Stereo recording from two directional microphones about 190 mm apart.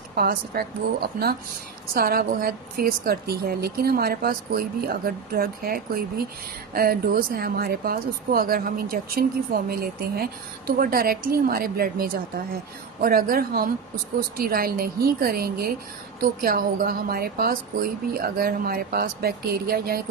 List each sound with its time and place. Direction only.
0.2 s a woman's voice: 55° right (ahead or behind)